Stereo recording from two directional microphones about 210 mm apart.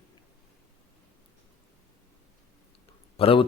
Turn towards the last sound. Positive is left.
turn(degrees=25)  # may be behind; listen again after turning